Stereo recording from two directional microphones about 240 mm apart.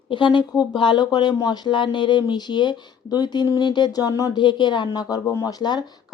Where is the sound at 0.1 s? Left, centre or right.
Centre.